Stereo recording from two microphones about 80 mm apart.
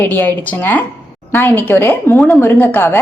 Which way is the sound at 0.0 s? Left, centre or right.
Left.